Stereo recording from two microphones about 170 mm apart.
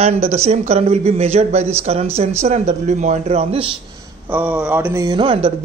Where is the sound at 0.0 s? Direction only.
40° right (ahead or behind).